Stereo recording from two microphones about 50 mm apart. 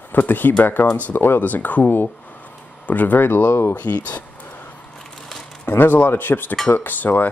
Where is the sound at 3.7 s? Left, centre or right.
Left.